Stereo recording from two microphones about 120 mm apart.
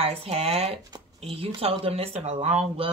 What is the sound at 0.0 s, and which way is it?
Speech, 55° right (ahead or behind).